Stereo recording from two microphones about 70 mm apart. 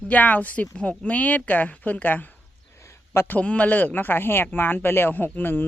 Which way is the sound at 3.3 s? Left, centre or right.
Centre.